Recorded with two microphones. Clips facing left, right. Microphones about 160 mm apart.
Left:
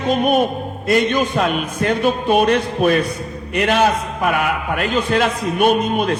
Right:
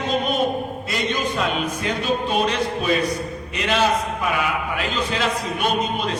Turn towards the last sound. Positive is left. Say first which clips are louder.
# left 6 dB
turn(degrees=55)  # may be behind; listen again after turning